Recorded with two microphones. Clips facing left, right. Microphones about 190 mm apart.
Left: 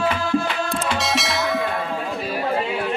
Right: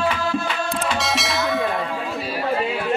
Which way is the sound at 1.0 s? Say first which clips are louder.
Even; centre (ahead or behind).